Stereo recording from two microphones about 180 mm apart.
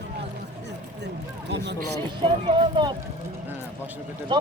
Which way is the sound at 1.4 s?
70° right (ahead or behind).